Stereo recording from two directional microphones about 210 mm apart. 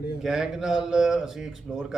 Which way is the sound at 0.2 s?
Centre (ahead or behind).